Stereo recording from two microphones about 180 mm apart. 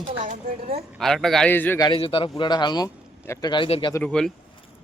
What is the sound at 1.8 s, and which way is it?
Speech, 30° left (ahead or behind).